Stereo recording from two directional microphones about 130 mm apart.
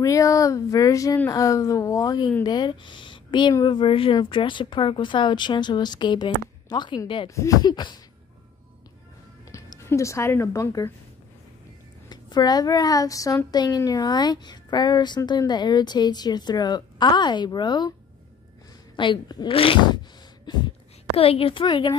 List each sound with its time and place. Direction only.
0.0 s a woman's voice: 25° left (ahead or behind)
7.2 s a woman's voice: 25° left (ahead or behind)
9.5 s speech: 25° left (ahead or behind)
12.1 s a woman's voice: 30° left (ahead or behind)
18.9 s a woman's voice: 35° left (ahead or behind)
20.4 s a sound: 35° left (ahead or behind)
21.2 s speech: 45° left (ahead or behind)